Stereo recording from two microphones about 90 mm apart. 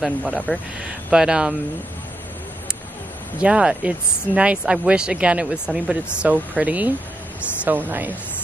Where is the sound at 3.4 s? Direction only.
10° right (ahead or behind).